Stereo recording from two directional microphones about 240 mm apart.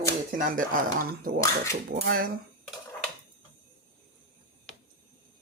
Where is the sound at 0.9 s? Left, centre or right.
Right.